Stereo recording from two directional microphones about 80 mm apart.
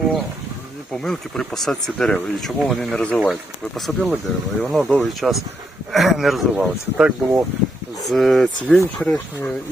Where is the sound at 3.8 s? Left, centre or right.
Centre.